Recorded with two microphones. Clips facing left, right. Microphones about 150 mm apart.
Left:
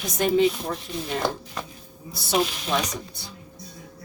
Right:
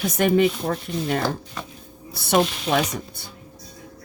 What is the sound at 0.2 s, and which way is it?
Speech, 60° right (ahead or behind).